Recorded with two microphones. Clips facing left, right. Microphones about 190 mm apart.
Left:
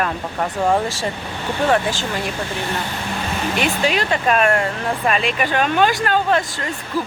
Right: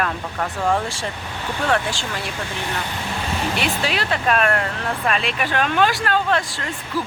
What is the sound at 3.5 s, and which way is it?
Speech, centre (ahead or behind).